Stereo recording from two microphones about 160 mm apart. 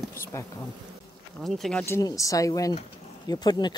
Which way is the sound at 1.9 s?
20° left (ahead or behind).